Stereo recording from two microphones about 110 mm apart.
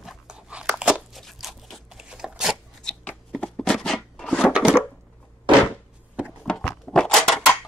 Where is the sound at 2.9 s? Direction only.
10° left (ahead or behind).